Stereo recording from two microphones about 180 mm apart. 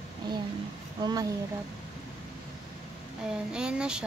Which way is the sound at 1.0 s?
20° right (ahead or behind).